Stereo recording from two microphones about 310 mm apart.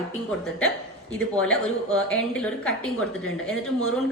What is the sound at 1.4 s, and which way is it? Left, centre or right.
A woman's voice, centre.